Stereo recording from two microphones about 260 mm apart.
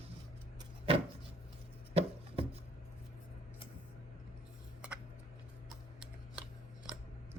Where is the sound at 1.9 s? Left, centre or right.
Right.